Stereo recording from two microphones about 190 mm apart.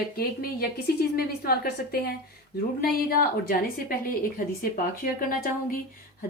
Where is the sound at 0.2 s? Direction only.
50° left (ahead or behind).